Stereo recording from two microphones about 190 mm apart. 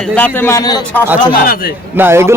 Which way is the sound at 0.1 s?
10° left (ahead or behind).